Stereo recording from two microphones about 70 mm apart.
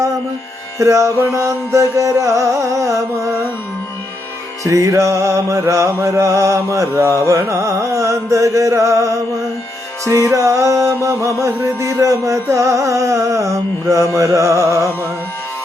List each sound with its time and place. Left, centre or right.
0.8 s music: right
4.6 s music: right